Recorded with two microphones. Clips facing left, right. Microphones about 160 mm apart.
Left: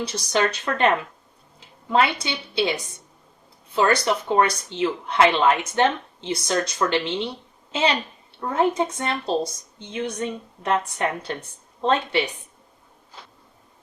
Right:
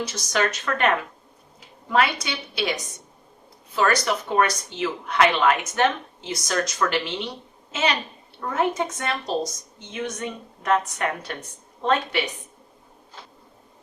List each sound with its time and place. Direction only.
0.0 s a woman's voice: 30° left (ahead or behind)
3.8 s a woman's voice: 25° left (ahead or behind)